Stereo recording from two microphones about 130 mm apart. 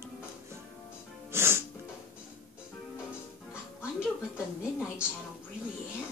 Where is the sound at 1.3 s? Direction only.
20° right (ahead or behind).